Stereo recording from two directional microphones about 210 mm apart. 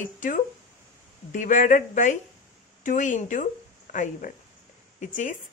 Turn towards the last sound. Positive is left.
turn(degrees=35)  # may be behind; listen again after turning